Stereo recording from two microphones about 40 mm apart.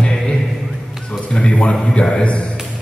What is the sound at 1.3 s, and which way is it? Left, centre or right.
A man's voice, left.